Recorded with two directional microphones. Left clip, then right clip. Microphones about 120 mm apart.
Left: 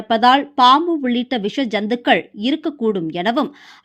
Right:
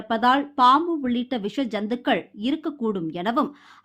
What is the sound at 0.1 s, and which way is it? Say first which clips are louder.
Speech: left 7 dB; 20° left (ahead or behind).